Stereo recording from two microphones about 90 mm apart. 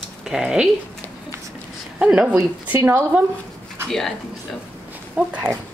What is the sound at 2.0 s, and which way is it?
Speech, 15° right (ahead or behind).